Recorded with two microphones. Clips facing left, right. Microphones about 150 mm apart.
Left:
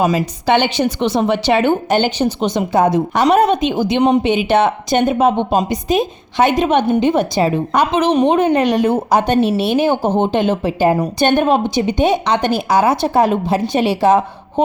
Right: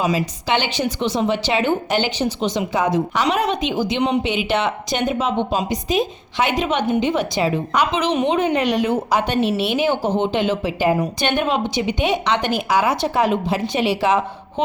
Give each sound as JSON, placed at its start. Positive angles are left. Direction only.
{"t": 0.0, "sound": "a woman's voice", "side_deg": 50}